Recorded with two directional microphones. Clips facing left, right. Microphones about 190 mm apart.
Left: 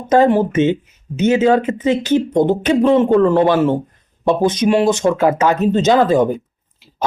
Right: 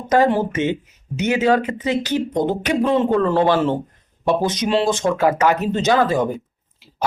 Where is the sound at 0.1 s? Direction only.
20° left (ahead or behind).